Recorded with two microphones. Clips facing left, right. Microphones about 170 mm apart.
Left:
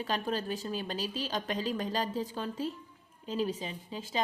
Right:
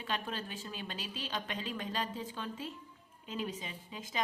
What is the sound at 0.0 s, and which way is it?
Speech, 40° left (ahead or behind).